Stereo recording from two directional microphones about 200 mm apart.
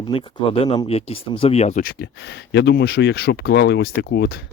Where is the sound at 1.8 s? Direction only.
50° left (ahead or behind).